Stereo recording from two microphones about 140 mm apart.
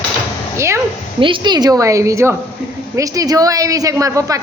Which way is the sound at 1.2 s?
35° right (ahead or behind).